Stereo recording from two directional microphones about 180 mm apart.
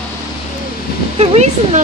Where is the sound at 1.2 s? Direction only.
35° right (ahead or behind).